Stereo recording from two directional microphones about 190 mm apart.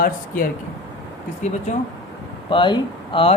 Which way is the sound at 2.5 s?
25° left (ahead or behind).